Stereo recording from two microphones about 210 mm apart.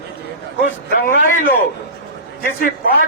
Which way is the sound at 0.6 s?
40° left (ahead or behind).